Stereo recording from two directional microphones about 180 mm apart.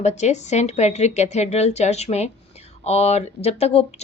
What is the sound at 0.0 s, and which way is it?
A woman's voice, 40° left (ahead or behind).